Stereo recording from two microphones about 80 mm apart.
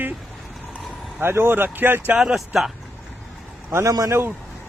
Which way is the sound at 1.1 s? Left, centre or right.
Right.